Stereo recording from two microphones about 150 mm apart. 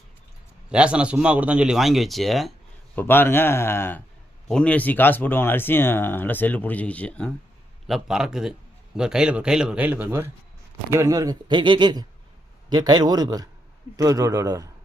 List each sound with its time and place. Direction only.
0.7 s speech: 5° right (ahead or behind)
2.9 s speech: 15° left (ahead or behind)
7.9 s a man's voice: centre (ahead or behind); by 14.7 s 25° right (ahead or behind)